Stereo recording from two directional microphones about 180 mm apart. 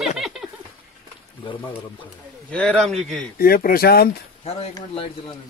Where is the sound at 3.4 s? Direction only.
55° left (ahead or behind).